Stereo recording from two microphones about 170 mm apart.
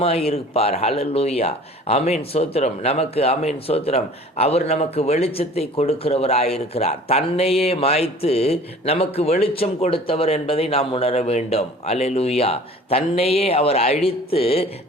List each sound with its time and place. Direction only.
0.0 s speech: 35° left (ahead or behind)